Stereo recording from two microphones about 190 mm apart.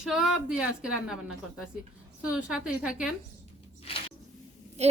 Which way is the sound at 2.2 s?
5° right (ahead or behind).